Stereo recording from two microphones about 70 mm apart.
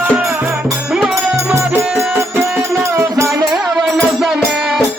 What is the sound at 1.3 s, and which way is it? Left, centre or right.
Music, right.